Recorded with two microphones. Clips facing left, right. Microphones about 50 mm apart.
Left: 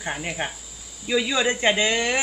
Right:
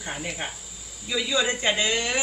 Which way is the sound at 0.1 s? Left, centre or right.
Left.